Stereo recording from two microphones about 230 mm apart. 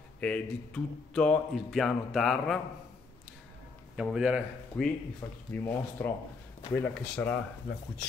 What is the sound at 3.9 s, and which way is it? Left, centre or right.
Speech, centre.